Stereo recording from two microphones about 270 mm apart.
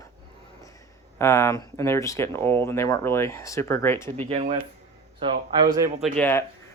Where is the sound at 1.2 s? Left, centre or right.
Centre.